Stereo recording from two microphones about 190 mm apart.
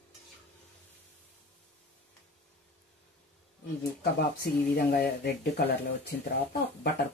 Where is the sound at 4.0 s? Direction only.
55° left (ahead or behind).